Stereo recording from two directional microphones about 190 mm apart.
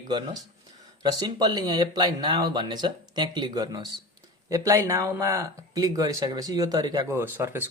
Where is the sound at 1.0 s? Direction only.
20° right (ahead or behind).